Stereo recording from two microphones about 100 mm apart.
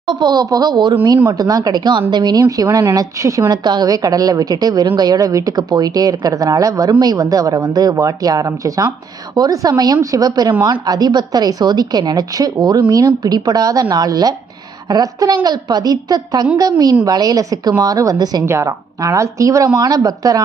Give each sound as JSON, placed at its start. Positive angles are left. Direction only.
{"t": 0.1, "sound": "a woman's voice", "side_deg": -45}
{"t": 2.4, "sound": "a woman's voice", "side_deg": -30}
{"t": 3.5, "sound": "a woman's voice", "side_deg": -45}
{"t": 18.4, "sound": "a woman's voice", "side_deg": -30}